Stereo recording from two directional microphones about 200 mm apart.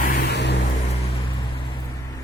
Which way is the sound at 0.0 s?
50° left (ahead or behind).